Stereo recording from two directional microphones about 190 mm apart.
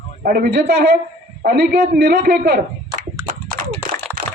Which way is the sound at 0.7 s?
60° right (ahead or behind).